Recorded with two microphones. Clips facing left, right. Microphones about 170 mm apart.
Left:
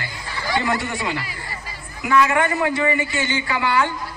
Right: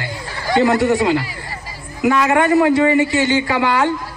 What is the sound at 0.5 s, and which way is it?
Speech, 40° right (ahead or behind).